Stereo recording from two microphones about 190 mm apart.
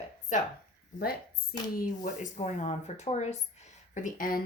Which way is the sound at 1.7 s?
45° left (ahead or behind).